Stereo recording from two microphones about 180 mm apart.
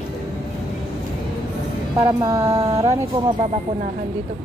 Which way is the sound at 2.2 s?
15° right (ahead or behind).